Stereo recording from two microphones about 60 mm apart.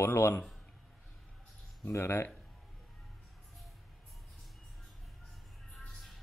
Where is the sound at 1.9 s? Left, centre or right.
Left.